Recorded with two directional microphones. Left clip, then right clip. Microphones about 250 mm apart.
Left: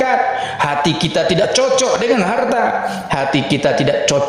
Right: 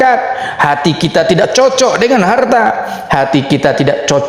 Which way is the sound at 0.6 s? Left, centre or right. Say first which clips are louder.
Right 6 dB; centre.